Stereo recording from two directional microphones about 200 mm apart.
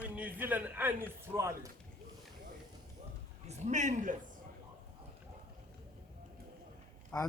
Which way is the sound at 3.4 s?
35° right (ahead or behind).